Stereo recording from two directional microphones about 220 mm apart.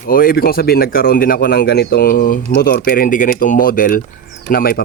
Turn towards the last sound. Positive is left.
turn(degrees=45)  # may be behind; listen again after turning